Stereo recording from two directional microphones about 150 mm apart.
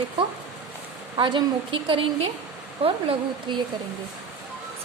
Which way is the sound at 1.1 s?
35° right (ahead or behind).